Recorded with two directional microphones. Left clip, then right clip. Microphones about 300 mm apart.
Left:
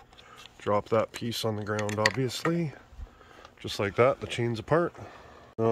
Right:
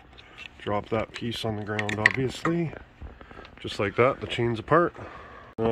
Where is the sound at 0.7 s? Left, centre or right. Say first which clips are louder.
Left 2 dB; centre.